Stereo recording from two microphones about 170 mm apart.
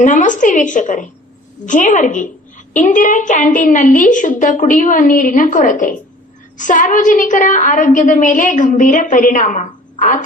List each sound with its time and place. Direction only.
0.0 s a woman's voice: 45° left (ahead or behind)